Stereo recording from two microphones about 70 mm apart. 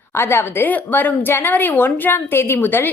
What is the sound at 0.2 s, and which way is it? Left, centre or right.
Speech, left.